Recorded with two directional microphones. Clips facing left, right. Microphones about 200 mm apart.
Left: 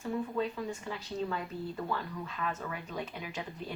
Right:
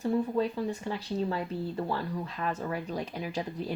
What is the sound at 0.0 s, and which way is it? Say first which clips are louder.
Speech: right 6 dB; 35° right (ahead or behind).